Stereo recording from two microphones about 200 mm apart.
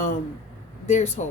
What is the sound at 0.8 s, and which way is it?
Speech, 35° left (ahead or behind).